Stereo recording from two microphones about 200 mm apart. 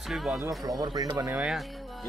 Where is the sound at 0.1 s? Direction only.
Centre (ahead or behind).